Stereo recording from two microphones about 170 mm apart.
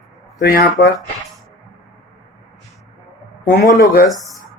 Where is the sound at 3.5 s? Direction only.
60° left (ahead or behind).